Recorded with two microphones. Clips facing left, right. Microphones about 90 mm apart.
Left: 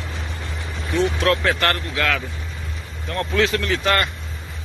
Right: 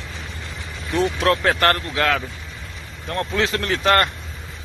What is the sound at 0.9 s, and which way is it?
Speech, 30° right (ahead or behind).